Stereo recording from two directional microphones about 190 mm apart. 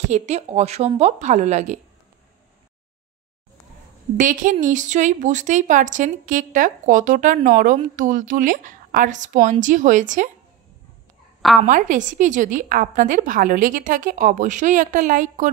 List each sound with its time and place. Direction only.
0.1 s speech: 35° right (ahead or behind)
4.2 s a woman's voice: 45° right (ahead or behind)
11.6 s a woman's voice: 45° right (ahead or behind)